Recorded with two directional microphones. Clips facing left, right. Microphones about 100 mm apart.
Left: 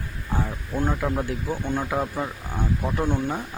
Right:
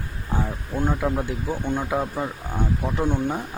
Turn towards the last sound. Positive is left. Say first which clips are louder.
# right 1 dB
turn(degrees=0)  # may be behind; listen again after turning